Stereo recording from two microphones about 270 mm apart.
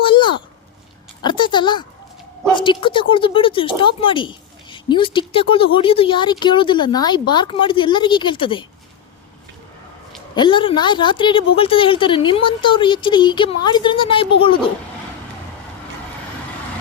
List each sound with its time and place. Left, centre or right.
0.0 s a sound: centre
2.6 s a woman's voice: centre
10.3 s a woman's voice: centre